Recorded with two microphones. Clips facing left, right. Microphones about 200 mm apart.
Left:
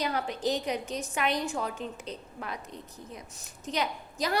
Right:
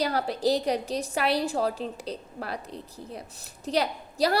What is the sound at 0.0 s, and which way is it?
A woman's voice, 35° right (ahead or behind).